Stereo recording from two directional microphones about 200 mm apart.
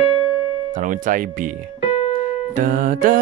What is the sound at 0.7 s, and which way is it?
Speech, 40° right (ahead or behind).